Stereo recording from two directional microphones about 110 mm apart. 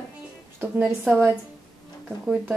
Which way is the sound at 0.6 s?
15° right (ahead or behind).